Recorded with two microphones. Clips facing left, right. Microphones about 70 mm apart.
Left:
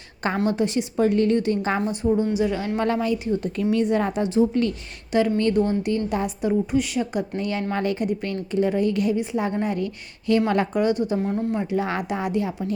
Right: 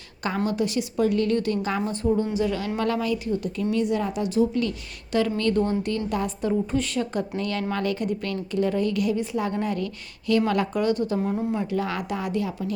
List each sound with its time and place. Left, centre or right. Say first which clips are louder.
0.4 s a woman's voice: left 2 dB; left
1.9 s a woman's voice: left 1 dB; centre
3.6 s a woman's voice: left 3 dB; left; by 11.2 s centre
11.2 s speech: left 1 dB; centre
11.6 s a woman's voice: left 2 dB; left